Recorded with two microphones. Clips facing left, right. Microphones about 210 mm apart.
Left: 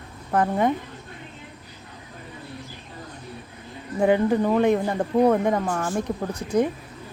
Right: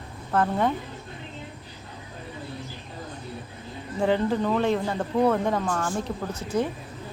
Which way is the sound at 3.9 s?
10° left (ahead or behind).